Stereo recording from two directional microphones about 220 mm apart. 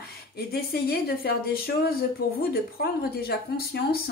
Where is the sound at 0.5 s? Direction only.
45° left (ahead or behind).